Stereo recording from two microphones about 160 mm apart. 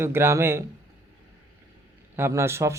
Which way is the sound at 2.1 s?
15° right (ahead or behind).